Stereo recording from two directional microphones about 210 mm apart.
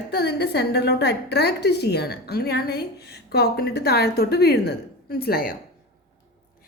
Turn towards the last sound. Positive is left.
turn(degrees=45)  # may be behind; listen again after turning